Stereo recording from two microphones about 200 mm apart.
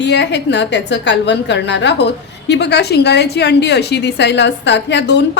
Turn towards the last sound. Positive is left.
turn(degrees=60)  # may be behind; listen again after turning